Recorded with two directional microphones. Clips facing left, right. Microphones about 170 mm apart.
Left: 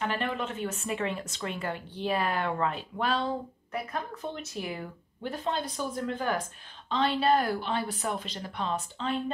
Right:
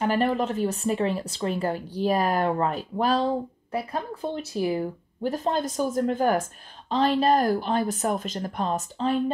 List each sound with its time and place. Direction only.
0.0 s a woman's voice: 40° right (ahead or behind)